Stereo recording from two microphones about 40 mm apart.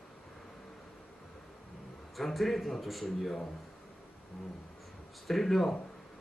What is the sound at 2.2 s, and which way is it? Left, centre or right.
A man's voice, centre.